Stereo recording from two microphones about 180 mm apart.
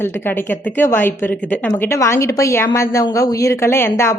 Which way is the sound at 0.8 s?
10° left (ahead or behind).